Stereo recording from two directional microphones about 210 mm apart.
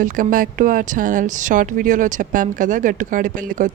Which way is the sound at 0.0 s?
40° right (ahead or behind).